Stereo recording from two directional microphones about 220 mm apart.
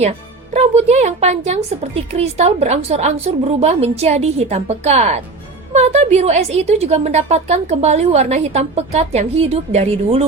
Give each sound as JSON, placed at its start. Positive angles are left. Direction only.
{"t": 0.5, "sound": "a woman's voice", "side_deg": -30}